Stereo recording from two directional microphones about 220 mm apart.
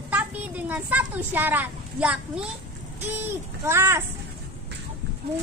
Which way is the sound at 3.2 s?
10° right (ahead or behind).